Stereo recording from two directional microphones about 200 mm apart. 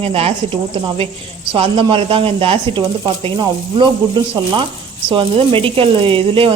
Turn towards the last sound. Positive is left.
turn(degrees=-25)  # may be behind; listen again after turning